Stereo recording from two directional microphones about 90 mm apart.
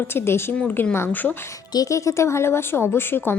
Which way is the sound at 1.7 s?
40° left (ahead or behind).